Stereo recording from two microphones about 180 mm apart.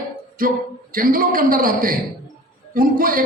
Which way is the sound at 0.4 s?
50° right (ahead or behind).